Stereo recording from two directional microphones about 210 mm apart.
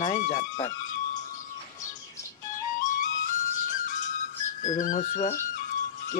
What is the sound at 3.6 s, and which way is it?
Music, 35° left (ahead or behind).